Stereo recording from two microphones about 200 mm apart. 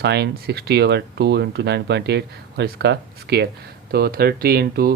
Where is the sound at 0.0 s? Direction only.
55° right (ahead or behind).